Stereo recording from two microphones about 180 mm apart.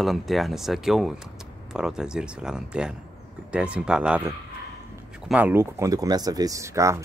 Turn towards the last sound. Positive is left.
turn(degrees=-15)  # may be behind; listen again after turning